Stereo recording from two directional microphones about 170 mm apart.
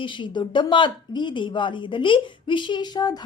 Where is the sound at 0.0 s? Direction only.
30° left (ahead or behind).